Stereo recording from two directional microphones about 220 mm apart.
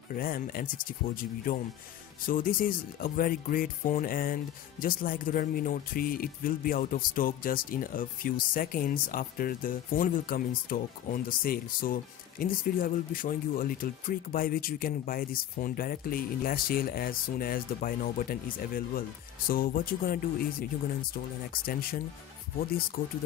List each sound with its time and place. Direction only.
0.1 s speech: 40° left (ahead or behind)
21.5 s speech: 40° left (ahead or behind)